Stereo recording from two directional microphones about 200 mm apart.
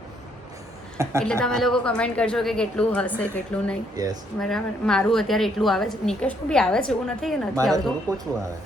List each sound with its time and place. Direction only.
1.2 s a woman's voice: 5° left (ahead or behind)
3.9 s speech: 20° right (ahead or behind)
4.4 s a woman's voice: centre (ahead or behind)